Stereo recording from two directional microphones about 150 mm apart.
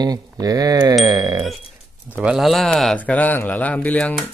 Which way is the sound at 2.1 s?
5° right (ahead or behind).